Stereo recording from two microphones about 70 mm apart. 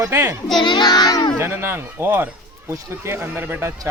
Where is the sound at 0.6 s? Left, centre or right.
Left.